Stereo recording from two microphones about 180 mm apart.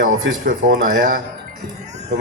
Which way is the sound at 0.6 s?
45° right (ahead or behind).